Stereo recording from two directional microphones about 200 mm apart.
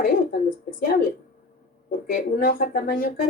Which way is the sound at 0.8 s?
45° left (ahead or behind).